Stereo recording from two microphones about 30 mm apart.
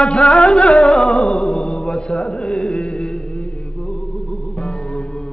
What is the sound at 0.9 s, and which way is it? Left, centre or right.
Music, left.